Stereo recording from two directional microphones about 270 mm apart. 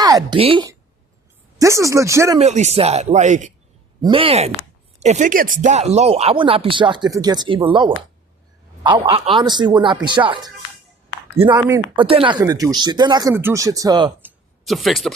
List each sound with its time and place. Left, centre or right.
0.0 s a woman's voice: centre
2.4 s speech: right
11.5 s speech: centre
14.6 s speech: centre